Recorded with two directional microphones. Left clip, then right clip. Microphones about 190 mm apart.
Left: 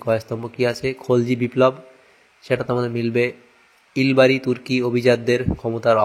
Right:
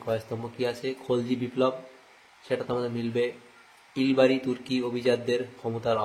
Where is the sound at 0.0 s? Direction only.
30° left (ahead or behind).